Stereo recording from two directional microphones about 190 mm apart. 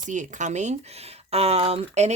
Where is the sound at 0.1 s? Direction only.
40° right (ahead or behind).